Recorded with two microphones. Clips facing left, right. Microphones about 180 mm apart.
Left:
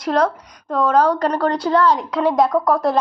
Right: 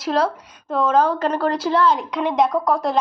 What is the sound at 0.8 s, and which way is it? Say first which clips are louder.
A woman's voice: left 2 dB; 25° right (ahead or behind).